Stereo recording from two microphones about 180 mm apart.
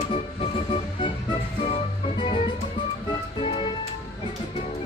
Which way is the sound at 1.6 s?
30° left (ahead or behind).